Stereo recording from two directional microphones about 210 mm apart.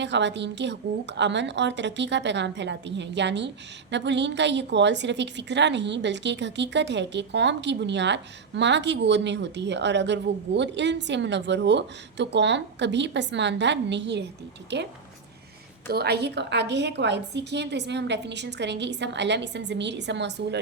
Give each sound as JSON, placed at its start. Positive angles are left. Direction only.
{"t": 0.0, "sound": "a woman's voice", "side_deg": -55}
{"t": 15.9, "sound": "a woman's voice", "side_deg": -50}